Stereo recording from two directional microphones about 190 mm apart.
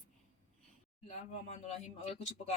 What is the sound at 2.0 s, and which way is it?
Speech, 35° left (ahead or behind).